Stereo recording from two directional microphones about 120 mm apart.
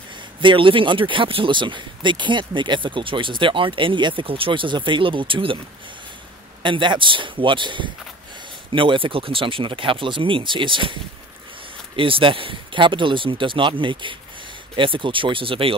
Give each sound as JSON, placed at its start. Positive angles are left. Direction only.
{"t": 0.4, "sound": "speech", "side_deg": -45}
{"t": 6.6, "sound": "speech", "side_deg": -40}
{"t": 12.0, "sound": "speech", "side_deg": -45}